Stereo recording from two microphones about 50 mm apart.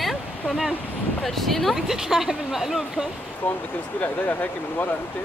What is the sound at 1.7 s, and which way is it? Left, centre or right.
Speech, centre.